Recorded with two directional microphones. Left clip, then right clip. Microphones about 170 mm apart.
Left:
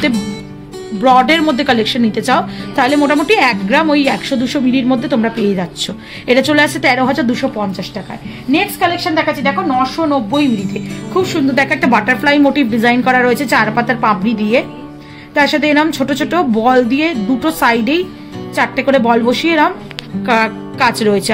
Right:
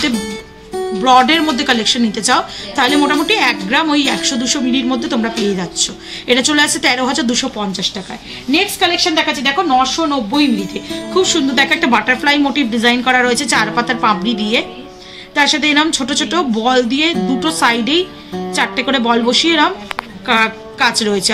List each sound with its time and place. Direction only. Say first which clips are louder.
1.0 s a woman's voice: left 1 dB; 50° left (ahead or behind)